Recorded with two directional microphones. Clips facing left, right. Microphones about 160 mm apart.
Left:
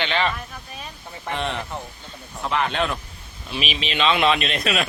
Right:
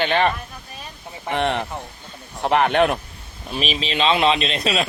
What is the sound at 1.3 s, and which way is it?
Speech, 65° right (ahead or behind).